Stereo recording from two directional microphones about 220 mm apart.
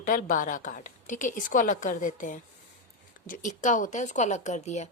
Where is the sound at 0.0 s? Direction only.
40° left (ahead or behind).